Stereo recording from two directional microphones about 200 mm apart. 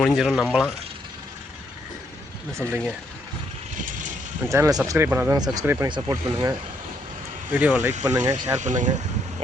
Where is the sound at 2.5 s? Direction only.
15° right (ahead or behind).